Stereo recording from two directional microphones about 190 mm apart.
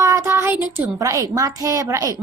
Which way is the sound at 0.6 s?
15° right (ahead or behind).